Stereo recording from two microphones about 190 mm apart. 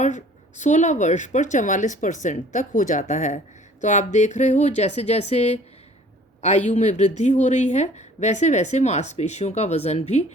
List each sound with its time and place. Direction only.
0.0 s a woman's voice: 40° left (ahead or behind)